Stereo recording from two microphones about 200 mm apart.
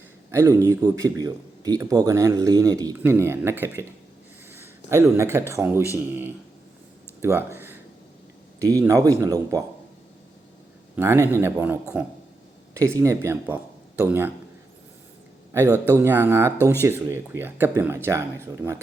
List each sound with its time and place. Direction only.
0.3 s a man's voice: 15° right (ahead or behind)
7.2 s a sound: 10° right (ahead or behind)
8.5 s a man's voice: 15° right (ahead or behind)
10.9 s a man's voice: 10° right (ahead or behind)
15.5 s a man's voice: 15° right (ahead or behind)